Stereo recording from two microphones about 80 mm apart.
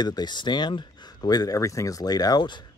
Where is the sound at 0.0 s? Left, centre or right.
Left.